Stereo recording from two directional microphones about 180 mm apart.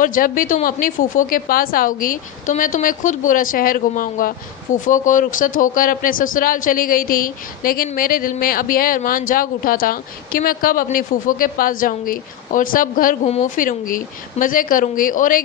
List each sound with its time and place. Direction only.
0.0 s speech: 50° left (ahead or behind)